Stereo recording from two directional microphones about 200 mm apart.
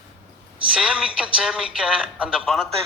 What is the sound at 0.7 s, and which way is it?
A man's voice, 5° right (ahead or behind).